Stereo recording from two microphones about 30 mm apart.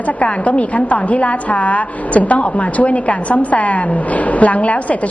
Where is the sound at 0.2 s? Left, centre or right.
Left.